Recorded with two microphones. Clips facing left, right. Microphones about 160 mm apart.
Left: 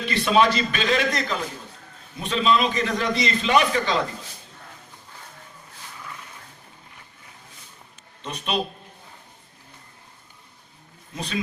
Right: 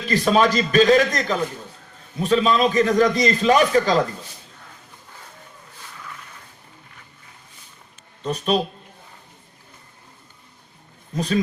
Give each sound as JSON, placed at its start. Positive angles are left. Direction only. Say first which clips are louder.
{"t": 0.0, "sound": "a man's voice", "louder": "right 2 dB", "side_deg": -40}
{"t": 8.2, "sound": "a man's voice", "louder": "right 8 dB", "side_deg": -40}
{"t": 11.1, "sound": "speech", "louder": "right 9 dB", "side_deg": -40}